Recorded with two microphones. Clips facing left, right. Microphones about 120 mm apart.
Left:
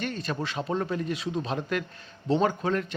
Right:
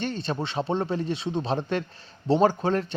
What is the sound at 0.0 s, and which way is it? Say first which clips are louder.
A man's voice: right 2 dB; 30° right (ahead or behind).